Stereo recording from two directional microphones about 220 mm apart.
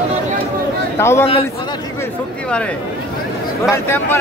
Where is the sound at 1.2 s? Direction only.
25° left (ahead or behind).